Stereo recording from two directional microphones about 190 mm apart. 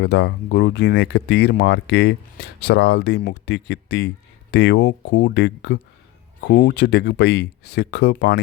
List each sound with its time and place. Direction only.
0.0 s speech: 65° left (ahead or behind)